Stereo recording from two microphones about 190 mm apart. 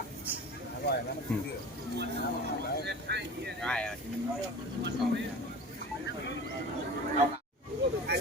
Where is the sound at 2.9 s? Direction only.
60° right (ahead or behind).